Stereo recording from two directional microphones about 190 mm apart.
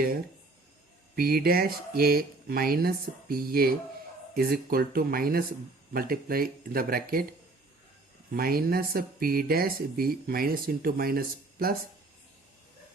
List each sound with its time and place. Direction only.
1.1 s speech: 50° right (ahead or behind)
8.3 s speech: 50° right (ahead or behind)